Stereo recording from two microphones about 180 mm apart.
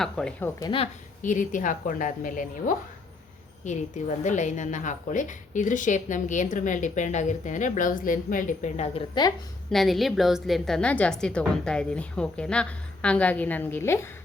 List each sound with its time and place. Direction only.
0.0 s a woman's voice: 5° left (ahead or behind)
0.6 s a woman's voice: 30° left (ahead or behind)
1.2 s a woman's voice: 45° left (ahead or behind)
9.6 s a woman's voice: centre (ahead or behind)